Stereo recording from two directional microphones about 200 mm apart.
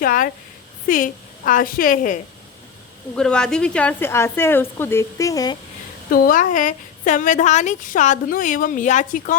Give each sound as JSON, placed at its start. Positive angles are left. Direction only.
{"t": 0.0, "sound": "a woman's voice", "side_deg": 45}
{"t": 3.2, "sound": "a woman's voice", "side_deg": 5}
{"t": 6.1, "sound": "a woman's voice", "side_deg": 45}